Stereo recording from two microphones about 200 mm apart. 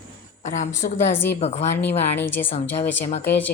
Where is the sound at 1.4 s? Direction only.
35° left (ahead or behind).